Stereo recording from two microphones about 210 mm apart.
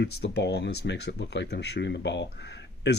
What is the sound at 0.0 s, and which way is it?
Speech, 55° left (ahead or behind).